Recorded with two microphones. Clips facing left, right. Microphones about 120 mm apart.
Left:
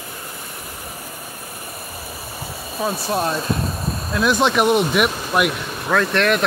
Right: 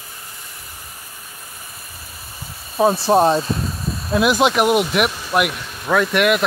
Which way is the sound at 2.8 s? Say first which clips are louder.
Right 8 dB; 30° right (ahead or behind).